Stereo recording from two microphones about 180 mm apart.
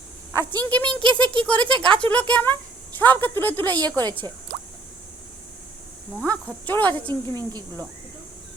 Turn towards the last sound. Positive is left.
turn(degrees=-25)  # may be behind; listen again after turning